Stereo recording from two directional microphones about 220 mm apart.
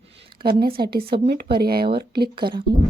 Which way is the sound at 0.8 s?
45° right (ahead or behind).